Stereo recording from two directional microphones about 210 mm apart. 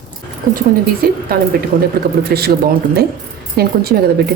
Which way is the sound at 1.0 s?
45° right (ahead or behind).